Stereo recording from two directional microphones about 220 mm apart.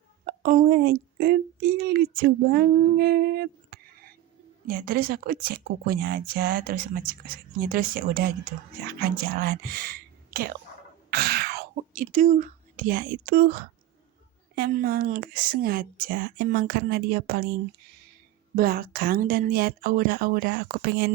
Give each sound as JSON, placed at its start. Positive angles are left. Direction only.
{"t": 0.3, "sound": "a woman's voice", "side_deg": -40}